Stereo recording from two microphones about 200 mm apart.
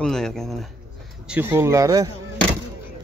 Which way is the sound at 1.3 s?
10° right (ahead or behind).